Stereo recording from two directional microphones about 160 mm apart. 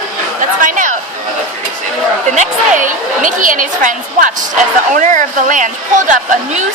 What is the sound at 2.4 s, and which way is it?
A woman's voice, 55° right (ahead or behind).